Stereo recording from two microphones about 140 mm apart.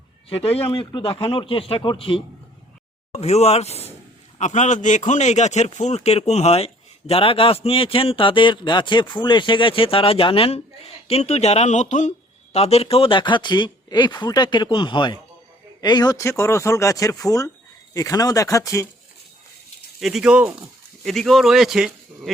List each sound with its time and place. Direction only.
0.3 s speech: 45° left (ahead or behind)
3.1 s a man's voice: 50° left (ahead or behind); by 18.9 s 25° left (ahead or behind)
20.0 s speech: centre (ahead or behind)